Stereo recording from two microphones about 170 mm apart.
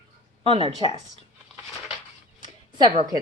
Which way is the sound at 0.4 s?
35° right (ahead or behind).